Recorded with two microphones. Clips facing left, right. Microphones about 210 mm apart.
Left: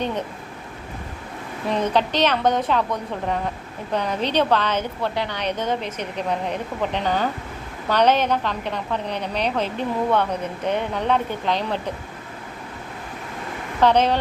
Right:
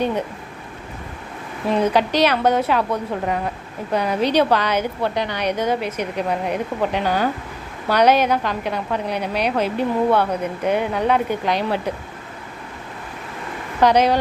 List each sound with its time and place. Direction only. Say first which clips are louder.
1.7 s a woman's voice: right 3 dB; 10° right (ahead or behind)
13.8 s a woman's voice: right 2 dB; 10° right (ahead or behind)